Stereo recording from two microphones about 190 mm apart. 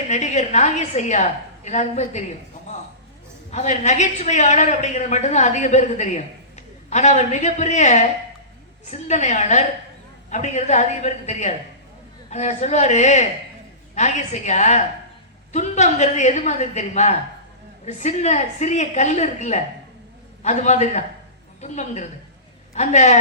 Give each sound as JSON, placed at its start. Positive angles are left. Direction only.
{"t": 0.1, "sound": "a woman's voice", "side_deg": 40}
{"t": 3.5, "sound": "a woman's voice", "side_deg": 40}